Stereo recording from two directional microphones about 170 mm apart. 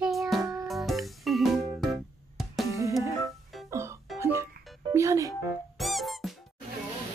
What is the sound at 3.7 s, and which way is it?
Music, 15° right (ahead or behind).